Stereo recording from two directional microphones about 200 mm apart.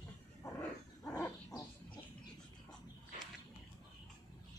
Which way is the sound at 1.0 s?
15° left (ahead or behind).